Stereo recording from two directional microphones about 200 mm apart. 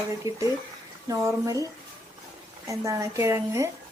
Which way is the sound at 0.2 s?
15° right (ahead or behind).